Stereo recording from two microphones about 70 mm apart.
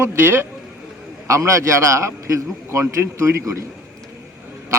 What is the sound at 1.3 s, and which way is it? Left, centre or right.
A man's voice, right.